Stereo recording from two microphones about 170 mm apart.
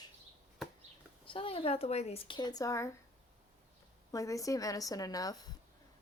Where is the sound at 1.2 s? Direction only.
30° left (ahead or behind).